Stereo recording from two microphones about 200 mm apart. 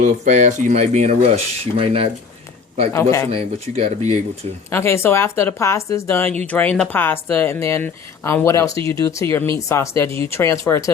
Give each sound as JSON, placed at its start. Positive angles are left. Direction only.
{"t": 0.0, "sound": "speech", "side_deg": -35}
{"t": 2.9, "sound": "a woman's voice", "side_deg": 15}
{"t": 3.3, "sound": "speech", "side_deg": -30}
{"t": 4.7, "sound": "a woman's voice", "side_deg": 10}